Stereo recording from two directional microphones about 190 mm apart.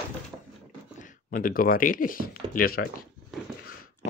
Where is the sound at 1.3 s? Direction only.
50° left (ahead or behind).